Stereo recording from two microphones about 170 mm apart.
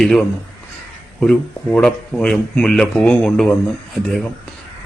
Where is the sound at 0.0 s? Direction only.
5° left (ahead or behind).